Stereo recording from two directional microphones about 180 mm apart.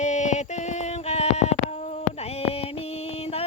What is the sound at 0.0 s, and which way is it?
Music, 40° left (ahead or behind).